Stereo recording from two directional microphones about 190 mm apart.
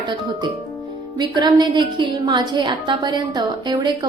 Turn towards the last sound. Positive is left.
turn(degrees=-25)  # may be behind; listen again after turning